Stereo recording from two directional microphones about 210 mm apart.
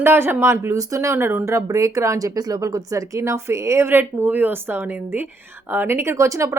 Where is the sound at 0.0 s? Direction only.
10° right (ahead or behind).